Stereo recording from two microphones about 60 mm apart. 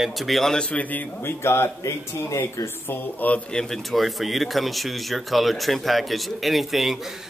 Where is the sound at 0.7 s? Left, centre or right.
Left.